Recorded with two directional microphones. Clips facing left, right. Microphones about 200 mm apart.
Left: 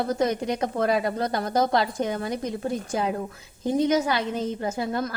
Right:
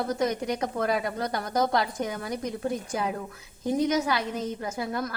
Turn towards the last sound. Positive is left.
turn(degrees=25)  # may be behind; listen again after turning